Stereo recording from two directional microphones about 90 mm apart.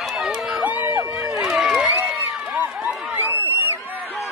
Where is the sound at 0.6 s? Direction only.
15° right (ahead or behind).